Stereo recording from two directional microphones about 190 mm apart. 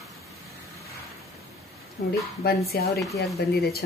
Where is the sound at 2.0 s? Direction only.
55° left (ahead or behind).